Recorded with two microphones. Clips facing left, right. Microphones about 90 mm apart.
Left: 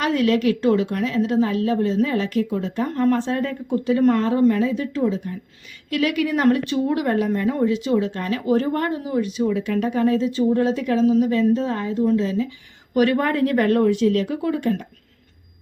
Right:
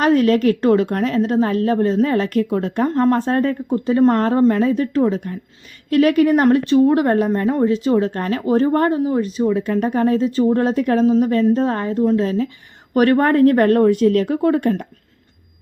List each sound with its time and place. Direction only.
0.0 s a woman's voice: 40° right (ahead or behind); by 2.8 s 60° right (ahead or behind)
2.8 s a woman's voice: 45° right (ahead or behind)
4.1 s a woman's voice: 50° right (ahead or behind)
5.9 s a woman's voice: 40° right (ahead or behind)